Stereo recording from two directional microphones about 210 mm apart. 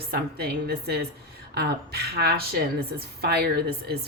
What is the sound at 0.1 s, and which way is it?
A woman's voice, 50° right (ahead or behind).